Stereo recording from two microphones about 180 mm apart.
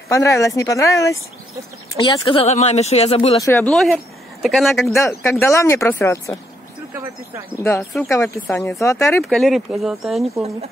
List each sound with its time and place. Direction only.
0.1 s speech: 15° left (ahead or behind)
2.0 s speech: 30° left (ahead or behind)
3.3 s speech: 15° left (ahead or behind)
3.7 s speech: centre (ahead or behind)
4.9 s speech: 15° left (ahead or behind)
6.9 s speech: 15° right (ahead or behind)
8.1 s speech: 15° left (ahead or behind)
9.2 s speech: centre (ahead or behind)